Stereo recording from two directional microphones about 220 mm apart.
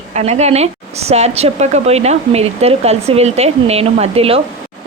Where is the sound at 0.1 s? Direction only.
30° right (ahead or behind).